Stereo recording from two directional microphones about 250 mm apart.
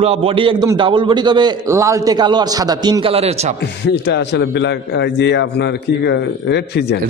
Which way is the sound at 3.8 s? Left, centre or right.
Left.